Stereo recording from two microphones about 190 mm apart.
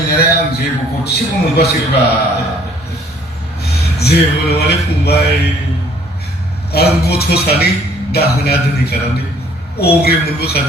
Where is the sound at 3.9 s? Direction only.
60° left (ahead or behind).